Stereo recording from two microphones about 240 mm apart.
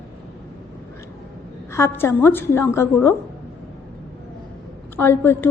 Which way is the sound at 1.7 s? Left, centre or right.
Centre.